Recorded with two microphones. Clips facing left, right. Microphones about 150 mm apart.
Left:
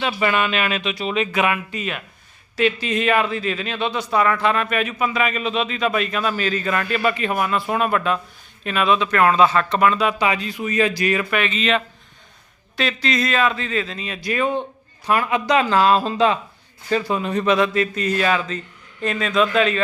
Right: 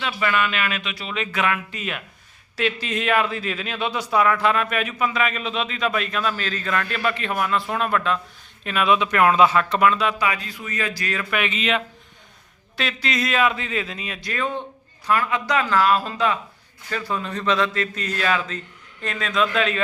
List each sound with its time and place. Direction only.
0.0 s speech: 25° left (ahead or behind)
1.7 s a man's voice: centre (ahead or behind)
9.0 s a man's voice: 15° right (ahead or behind); by 10.2 s centre (ahead or behind)
10.2 s speech: 20° left (ahead or behind)
11.4 s a man's voice: 10° right (ahead or behind)
14.2 s a man's voice: 10° left (ahead or behind)